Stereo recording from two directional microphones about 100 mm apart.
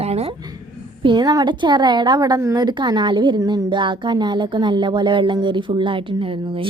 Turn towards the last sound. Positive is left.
turn(degrees=-60)  # may be behind; listen again after turning